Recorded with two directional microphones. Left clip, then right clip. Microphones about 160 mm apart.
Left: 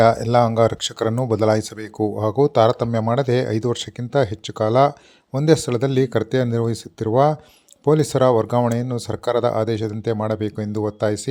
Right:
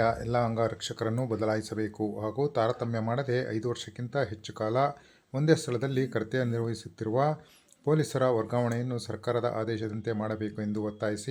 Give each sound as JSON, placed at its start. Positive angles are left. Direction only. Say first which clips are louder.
{"t": 0.0, "sound": "speech", "louder": "left 12 dB", "side_deg": 45}